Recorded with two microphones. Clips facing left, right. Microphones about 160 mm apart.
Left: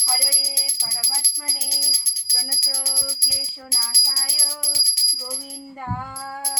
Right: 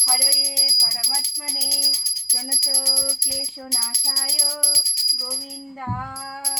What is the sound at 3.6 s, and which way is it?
Music, 20° right (ahead or behind).